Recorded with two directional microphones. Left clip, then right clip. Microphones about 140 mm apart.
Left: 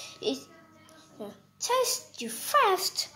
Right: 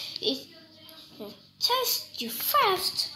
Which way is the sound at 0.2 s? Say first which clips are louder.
Right 2 dB; 90° left.